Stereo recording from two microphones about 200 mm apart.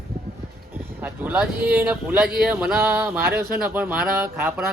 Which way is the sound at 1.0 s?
5° right (ahead or behind).